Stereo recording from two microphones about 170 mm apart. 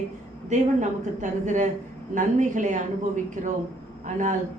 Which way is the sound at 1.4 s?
45° right (ahead or behind).